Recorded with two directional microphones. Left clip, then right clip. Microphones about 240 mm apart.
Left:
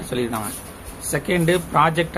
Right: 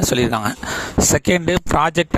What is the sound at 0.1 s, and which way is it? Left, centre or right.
Speech, right.